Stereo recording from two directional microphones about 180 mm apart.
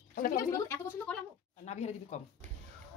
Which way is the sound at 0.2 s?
50° left (ahead or behind).